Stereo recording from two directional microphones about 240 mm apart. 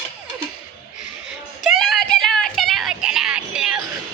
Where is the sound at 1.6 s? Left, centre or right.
Centre.